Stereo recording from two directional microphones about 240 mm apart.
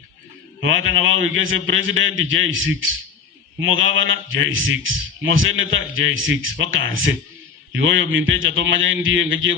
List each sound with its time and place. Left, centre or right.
0.6 s a man's voice: right